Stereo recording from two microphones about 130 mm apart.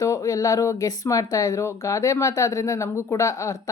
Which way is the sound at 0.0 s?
25° left (ahead or behind).